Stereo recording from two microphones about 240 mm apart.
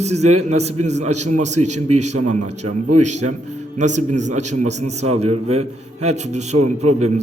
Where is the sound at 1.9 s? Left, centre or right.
Right.